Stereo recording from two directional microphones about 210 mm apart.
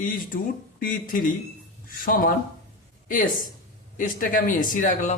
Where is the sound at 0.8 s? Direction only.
40° left (ahead or behind).